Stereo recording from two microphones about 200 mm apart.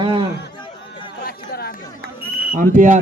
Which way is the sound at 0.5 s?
25° left (ahead or behind).